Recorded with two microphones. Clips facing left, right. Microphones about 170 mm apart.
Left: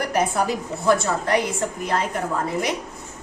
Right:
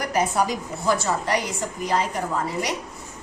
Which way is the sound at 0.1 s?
55° left (ahead or behind).